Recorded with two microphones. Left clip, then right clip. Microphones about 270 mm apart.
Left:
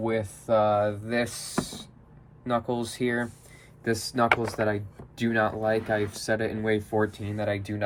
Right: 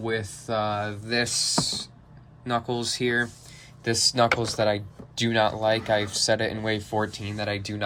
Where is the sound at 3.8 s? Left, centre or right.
Centre.